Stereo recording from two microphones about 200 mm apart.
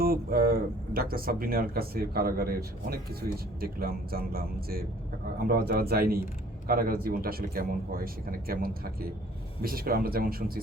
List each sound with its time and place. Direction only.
0.0 s speech: 50° right (ahead or behind)